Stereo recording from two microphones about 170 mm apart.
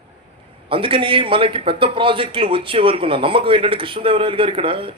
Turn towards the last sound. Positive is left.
turn(degrees=-30)  # may be behind; listen again after turning